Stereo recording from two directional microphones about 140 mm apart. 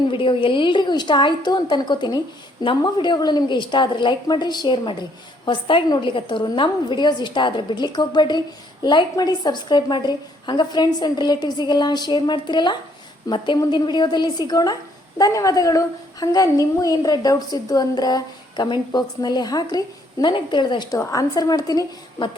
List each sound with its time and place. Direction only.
0.1 s a woman's voice: 35° left (ahead or behind)